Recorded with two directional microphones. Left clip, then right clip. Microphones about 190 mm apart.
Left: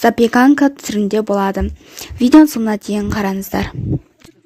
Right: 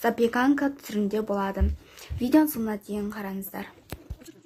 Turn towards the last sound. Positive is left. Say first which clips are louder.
# left 16 dB
turn(degrees=45)  # may be behind; listen again after turning